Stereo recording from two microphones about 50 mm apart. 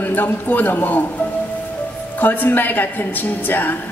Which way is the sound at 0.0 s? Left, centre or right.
Left.